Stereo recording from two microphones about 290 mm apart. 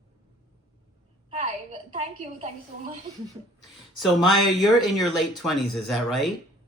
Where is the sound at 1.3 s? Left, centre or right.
Right.